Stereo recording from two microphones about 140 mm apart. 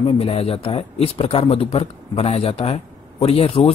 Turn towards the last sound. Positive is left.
turn(degrees=45)  # may be behind; listen again after turning